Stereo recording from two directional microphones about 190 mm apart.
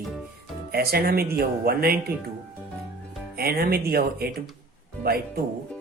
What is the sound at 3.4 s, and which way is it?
Speech, 55° right (ahead or behind).